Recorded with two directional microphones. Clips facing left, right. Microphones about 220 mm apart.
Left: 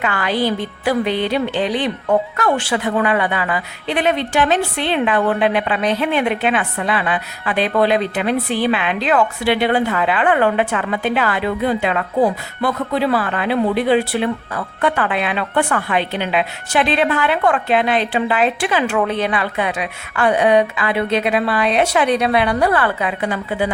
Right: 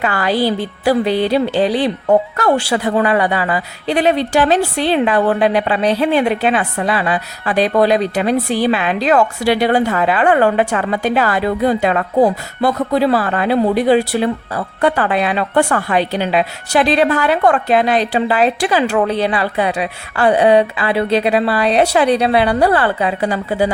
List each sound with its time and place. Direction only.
0.0 s speech: 35° right (ahead or behind)